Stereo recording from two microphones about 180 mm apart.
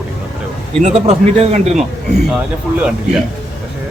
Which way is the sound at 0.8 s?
40° right (ahead or behind).